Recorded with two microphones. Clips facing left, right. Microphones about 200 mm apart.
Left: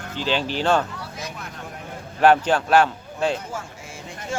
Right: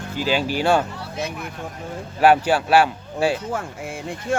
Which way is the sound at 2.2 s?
10° right (ahead or behind).